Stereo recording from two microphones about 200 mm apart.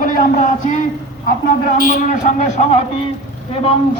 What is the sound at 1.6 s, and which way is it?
A man's voice, 45° left (ahead or behind).